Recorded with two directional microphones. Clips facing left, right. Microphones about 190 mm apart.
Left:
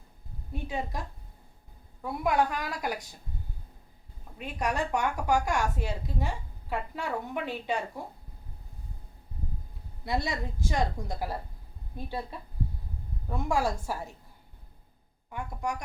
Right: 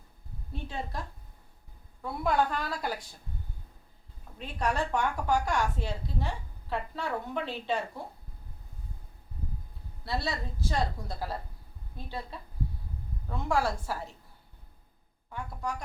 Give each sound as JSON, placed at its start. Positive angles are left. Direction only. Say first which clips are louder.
{"t": 0.5, "sound": "a woman's voice", "louder": "left 3 dB", "side_deg": 10}
{"t": 4.4, "sound": "a woman's voice", "louder": "even", "side_deg": 15}
{"t": 10.1, "sound": "a woman's voice", "louder": "left 2 dB", "side_deg": 15}